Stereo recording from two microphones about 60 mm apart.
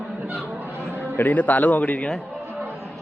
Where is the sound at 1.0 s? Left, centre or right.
Left.